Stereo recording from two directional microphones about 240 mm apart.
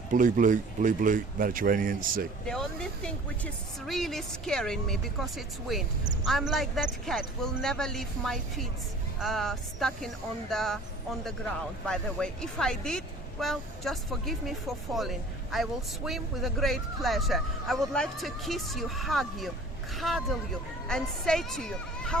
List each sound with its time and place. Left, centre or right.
0.1 s speech: right
2.5 s a man's voice: centre
11.9 s a man's voice: centre
15.5 s a man's voice: centre